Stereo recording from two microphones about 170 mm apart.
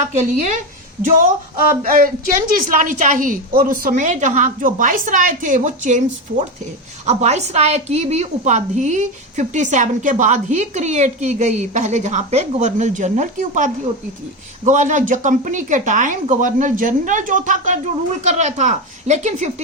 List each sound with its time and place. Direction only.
0.2 s a woman's voice: 45° right (ahead or behind)